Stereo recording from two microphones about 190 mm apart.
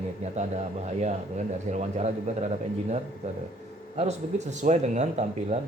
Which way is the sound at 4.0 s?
35° right (ahead or behind).